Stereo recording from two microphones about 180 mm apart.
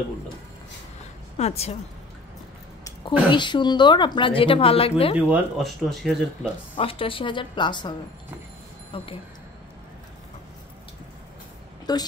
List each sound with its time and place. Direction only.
1.4 s a woman's voice: 35° left (ahead or behind)
3.3 s speech: 25° left (ahead or behind)
5.3 s speech: centre (ahead or behind)
6.8 s speech: 30° left (ahead or behind)
8.9 s a woman's voice: 30° left (ahead or behind)
11.8 s speech: 20° left (ahead or behind)